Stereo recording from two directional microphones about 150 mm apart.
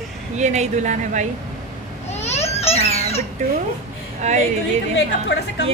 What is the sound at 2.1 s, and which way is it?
Baby cry, 45° left (ahead or behind).